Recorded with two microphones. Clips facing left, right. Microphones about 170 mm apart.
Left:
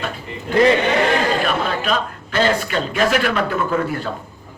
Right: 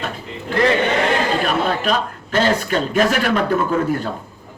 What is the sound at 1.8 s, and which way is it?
Speech, 40° right (ahead or behind).